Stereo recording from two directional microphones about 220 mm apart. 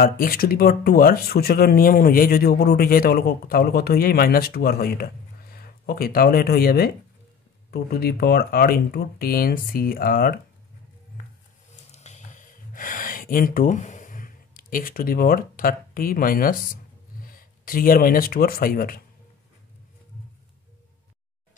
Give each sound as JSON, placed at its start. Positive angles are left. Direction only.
{"t": 0.0, "sound": "speech", "side_deg": 40}
{"t": 11.7, "sound": "gasp", "side_deg": 30}
{"t": 17.2, "sound": "speech", "side_deg": 40}